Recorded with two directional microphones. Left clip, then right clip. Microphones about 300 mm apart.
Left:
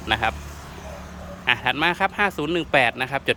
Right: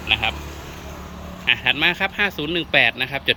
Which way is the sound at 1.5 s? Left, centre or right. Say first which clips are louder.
Right 2 dB; centre.